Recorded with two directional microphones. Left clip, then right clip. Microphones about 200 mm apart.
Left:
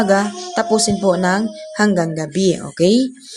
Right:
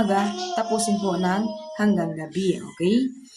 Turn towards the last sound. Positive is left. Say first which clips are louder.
# left 9 dB
turn(degrees=40)  # may be behind; listen again after turning